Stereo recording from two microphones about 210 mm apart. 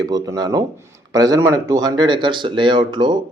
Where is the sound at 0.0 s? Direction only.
20° right (ahead or behind).